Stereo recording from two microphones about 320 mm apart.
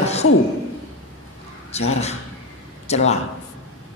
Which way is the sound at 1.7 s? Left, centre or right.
Centre.